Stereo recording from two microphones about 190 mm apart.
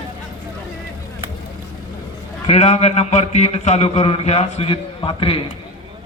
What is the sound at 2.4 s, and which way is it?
A man's voice, 35° left (ahead or behind).